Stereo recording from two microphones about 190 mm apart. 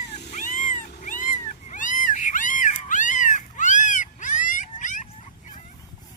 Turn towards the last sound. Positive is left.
turn(degrees=40)  # may be behind; listen again after turning